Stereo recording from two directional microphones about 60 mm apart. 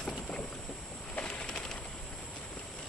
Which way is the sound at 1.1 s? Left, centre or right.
Centre.